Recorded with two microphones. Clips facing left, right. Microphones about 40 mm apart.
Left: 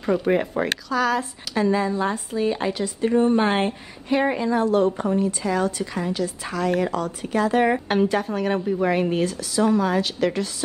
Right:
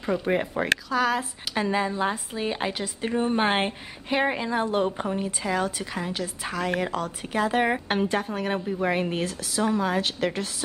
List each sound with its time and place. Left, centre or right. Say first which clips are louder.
0.0 s speech: left 4 dB; centre
0.8 s a woman's voice: left 2 dB; centre